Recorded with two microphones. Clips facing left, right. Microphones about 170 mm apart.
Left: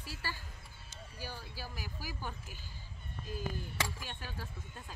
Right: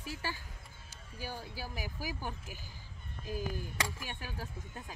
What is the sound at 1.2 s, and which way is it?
Speech, 50° right (ahead or behind).